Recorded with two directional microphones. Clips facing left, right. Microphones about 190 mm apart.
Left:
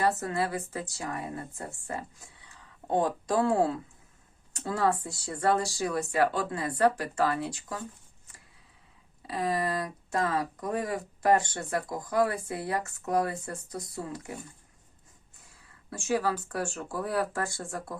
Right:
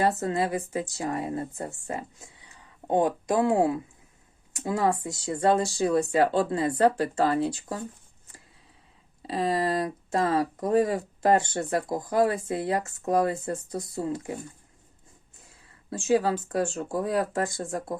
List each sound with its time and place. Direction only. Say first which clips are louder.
0.0 s speech: right 3 dB; 25° right (ahead or behind)
9.2 s speech: right 4 dB; 25° right (ahead or behind)
15.9 s speech: right 5 dB; 20° right (ahead or behind)